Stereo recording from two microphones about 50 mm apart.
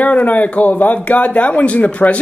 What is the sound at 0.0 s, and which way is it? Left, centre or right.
Speech, left.